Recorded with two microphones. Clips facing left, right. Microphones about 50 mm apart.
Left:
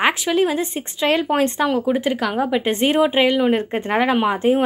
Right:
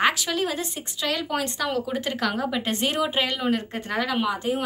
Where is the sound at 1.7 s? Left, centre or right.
Centre.